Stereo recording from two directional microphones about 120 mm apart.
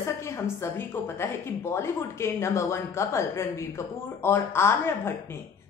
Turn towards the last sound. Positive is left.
turn(degrees=20)  # may be behind; listen again after turning